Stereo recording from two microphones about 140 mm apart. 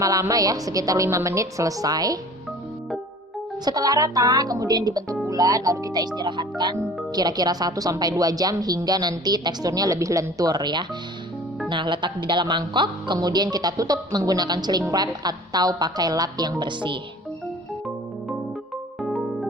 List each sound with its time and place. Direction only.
0.0 s a woman's voice: 25° right (ahead or behind)
3.6 s a woman's voice: 30° right (ahead or behind)
19.0 s music: centre (ahead or behind)